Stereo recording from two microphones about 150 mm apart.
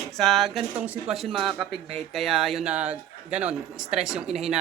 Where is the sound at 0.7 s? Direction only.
10° right (ahead or behind).